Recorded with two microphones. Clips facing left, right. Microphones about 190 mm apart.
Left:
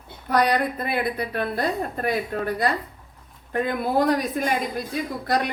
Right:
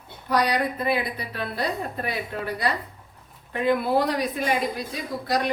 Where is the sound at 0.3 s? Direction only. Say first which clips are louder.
Left 2 dB; 50° left (ahead or behind).